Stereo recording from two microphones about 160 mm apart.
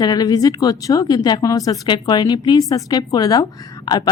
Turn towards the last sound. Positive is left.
turn(degrees=25)  # may be behind; listen again after turning